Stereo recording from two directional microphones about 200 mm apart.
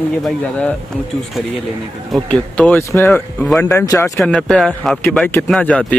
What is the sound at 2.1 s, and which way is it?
Speech, 5° left (ahead or behind).